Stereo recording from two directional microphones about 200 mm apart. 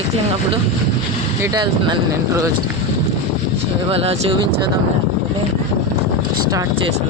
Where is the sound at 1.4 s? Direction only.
20° right (ahead or behind).